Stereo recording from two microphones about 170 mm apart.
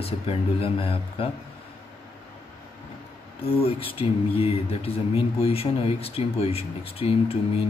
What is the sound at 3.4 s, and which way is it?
Speech, 35° left (ahead or behind).